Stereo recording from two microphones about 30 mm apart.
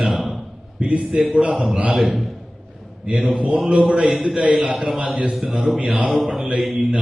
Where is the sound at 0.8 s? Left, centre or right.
Right.